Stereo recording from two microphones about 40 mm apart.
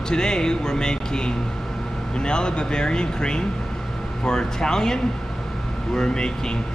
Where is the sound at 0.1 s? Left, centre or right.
Centre.